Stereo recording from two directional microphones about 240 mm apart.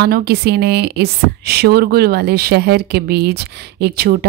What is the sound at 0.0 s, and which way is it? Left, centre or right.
Speech, right.